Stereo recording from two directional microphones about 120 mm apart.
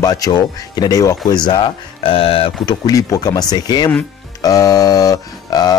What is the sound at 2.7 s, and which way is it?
Speech, 30° left (ahead or behind).